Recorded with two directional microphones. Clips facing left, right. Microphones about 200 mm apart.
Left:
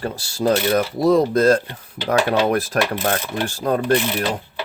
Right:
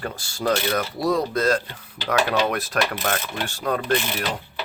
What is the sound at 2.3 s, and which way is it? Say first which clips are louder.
Speech: left 4 dB; 30° left (ahead or behind).